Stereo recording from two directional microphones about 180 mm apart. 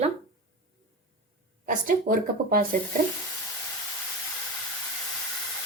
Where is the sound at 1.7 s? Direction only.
50° right (ahead or behind).